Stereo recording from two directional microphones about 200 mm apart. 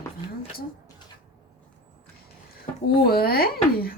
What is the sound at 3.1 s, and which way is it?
Speech, 50° left (ahead or behind).